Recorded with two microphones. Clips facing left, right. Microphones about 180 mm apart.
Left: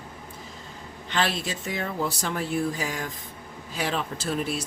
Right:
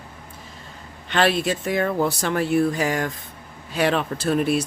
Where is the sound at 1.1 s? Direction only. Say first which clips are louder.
Right 7 dB; 60° right (ahead or behind).